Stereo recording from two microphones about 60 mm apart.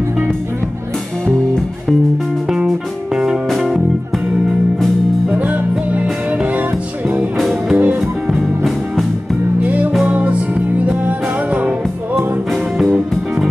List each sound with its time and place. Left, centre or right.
3.4 s music: centre
5.3 s music: right
7.3 s music: centre
9.6 s music: right